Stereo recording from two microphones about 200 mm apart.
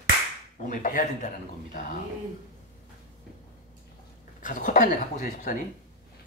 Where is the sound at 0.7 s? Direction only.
40° left (ahead or behind).